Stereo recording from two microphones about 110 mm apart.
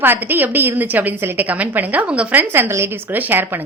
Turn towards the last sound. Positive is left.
turn(degrees=-20)  # may be behind; listen again after turning